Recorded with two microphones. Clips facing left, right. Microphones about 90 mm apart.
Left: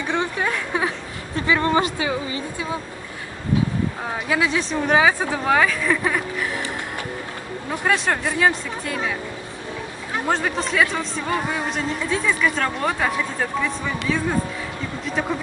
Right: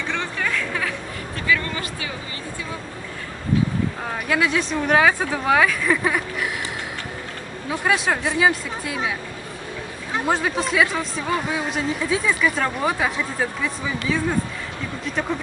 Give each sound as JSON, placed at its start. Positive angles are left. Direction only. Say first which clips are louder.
{"t": 0.0, "sound": "a sound", "louder": "left 3 dB", "side_deg": 20}
{"t": 4.1, "sound": "speech", "louder": "even", "side_deg": 5}
{"t": 7.8, "sound": "speech", "louder": "even", "side_deg": -5}
{"t": 10.2, "sound": "speech", "louder": "right 1 dB", "side_deg": -5}